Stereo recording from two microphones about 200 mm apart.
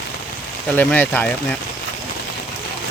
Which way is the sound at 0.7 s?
10° left (ahead or behind).